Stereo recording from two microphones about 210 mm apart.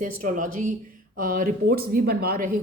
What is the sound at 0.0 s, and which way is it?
A woman's voice, 40° right (ahead or behind).